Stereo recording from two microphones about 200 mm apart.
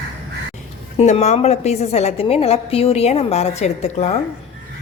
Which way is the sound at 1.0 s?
35° left (ahead or behind).